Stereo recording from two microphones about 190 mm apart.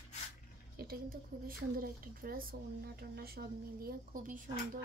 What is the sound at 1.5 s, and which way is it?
Speech, 50° right (ahead or behind).